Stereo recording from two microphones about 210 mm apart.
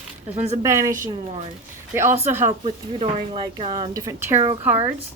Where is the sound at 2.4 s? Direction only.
30° right (ahead or behind).